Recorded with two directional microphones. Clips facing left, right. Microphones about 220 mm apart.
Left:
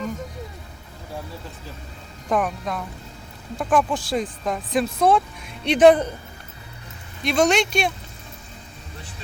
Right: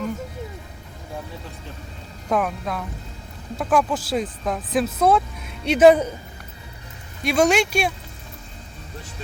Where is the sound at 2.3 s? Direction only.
5° right (ahead or behind).